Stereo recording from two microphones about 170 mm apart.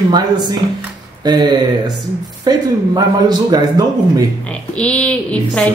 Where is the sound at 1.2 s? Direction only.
25° right (ahead or behind).